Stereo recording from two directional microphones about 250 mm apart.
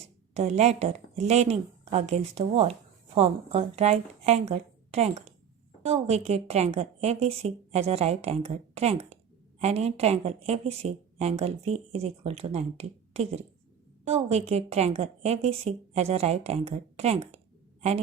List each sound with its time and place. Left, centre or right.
0.0 s a woman's voice: right